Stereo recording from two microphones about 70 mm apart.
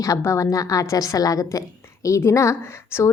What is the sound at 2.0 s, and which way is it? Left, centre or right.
A woman's voice, left.